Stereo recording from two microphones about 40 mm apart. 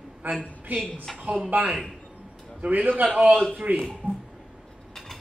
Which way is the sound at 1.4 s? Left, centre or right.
Right.